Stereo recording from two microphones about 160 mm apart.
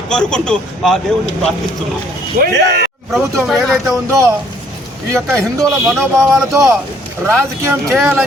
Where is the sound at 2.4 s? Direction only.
90° right.